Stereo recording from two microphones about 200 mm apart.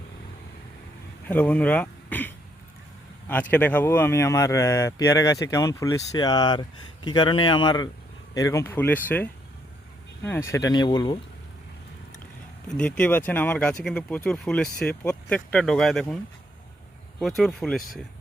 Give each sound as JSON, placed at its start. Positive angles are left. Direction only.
{"t": 1.3, "sound": "speech", "side_deg": 10}
{"t": 12.6, "sound": "speech", "side_deg": 5}
{"t": 17.2, "sound": "speech", "side_deg": 0}